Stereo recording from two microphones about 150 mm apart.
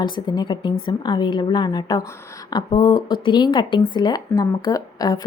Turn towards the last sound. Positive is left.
turn(degrees=25)  # may be behind; listen again after turning